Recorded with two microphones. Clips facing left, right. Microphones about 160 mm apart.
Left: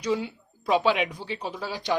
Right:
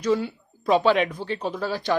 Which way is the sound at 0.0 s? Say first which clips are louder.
Right 4 dB; 15° left (ahead or behind).